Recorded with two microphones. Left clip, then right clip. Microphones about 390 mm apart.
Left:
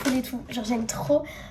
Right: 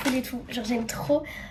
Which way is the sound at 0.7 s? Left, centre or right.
Left.